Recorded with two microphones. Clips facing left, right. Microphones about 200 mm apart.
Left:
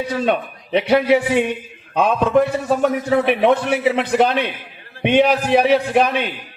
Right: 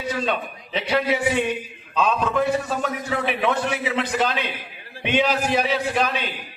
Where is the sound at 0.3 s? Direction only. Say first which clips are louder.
Left 7 dB; 60° left (ahead or behind).